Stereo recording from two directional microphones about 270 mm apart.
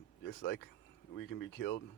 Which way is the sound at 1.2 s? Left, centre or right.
Left.